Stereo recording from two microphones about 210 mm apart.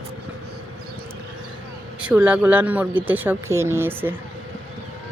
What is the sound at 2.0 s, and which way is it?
Speech, 5° right (ahead or behind).